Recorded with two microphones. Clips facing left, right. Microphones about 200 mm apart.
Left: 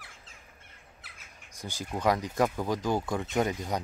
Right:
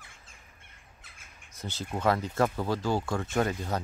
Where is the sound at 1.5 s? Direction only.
15° left (ahead or behind).